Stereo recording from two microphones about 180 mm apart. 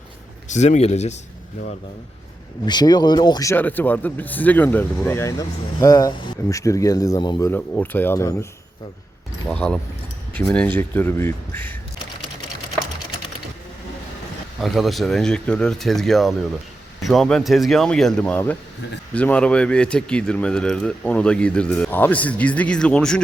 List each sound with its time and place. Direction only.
0.4 s speech: 40° left (ahead or behind)
2.6 s a man's voice: 25° left (ahead or behind)
7.5 s a man's voice: 10° left (ahead or behind)
9.5 s a man's voice: 5° left (ahead or behind)
14.6 s speech: centre (ahead or behind)